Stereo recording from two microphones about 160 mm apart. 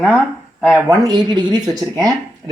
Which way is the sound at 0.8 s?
25° right (ahead or behind).